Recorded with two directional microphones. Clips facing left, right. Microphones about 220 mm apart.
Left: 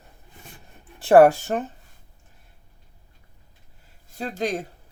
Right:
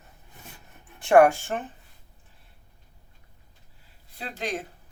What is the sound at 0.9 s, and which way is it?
Speech, 35° left (ahead or behind).